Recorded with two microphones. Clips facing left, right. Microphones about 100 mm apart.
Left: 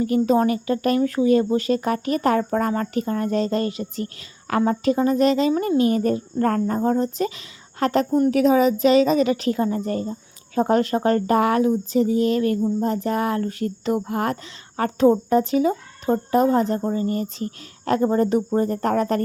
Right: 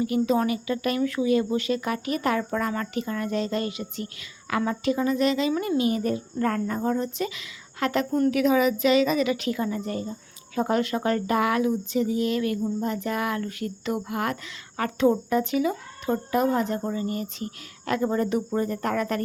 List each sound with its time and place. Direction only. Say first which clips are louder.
0.0 s speech: left 5 dB; 40° left (ahead or behind)